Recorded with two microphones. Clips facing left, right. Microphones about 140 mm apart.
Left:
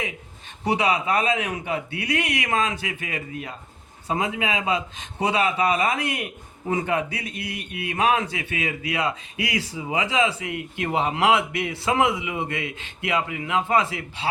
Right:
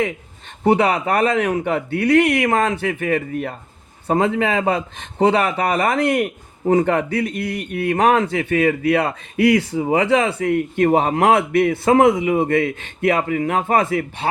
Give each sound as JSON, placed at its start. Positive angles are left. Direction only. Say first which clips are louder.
{"t": 0.6, "sound": "a man's voice", "louder": "right 6 dB", "side_deg": -55}